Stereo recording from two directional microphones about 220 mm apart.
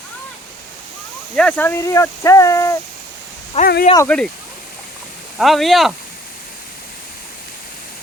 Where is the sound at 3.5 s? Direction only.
30° left (ahead or behind).